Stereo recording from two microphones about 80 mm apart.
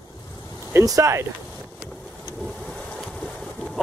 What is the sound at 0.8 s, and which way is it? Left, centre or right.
Speech, right.